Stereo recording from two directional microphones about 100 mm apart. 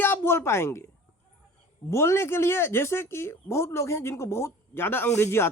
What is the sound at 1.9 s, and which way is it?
Speech, 25° left (ahead or behind).